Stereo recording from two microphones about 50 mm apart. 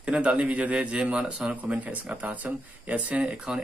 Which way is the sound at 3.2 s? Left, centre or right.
Centre.